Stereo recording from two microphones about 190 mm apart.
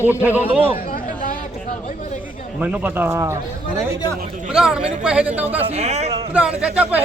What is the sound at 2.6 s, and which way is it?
Speech, 10° right (ahead or behind).